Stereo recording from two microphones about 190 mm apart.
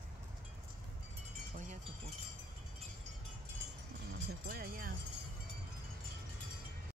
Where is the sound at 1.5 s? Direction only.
40° right (ahead or behind).